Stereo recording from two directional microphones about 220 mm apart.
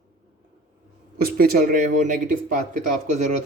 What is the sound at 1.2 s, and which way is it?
Speech, 40° right (ahead or behind).